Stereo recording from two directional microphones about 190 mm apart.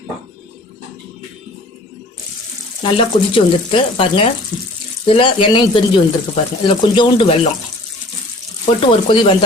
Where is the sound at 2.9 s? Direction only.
25° left (ahead or behind).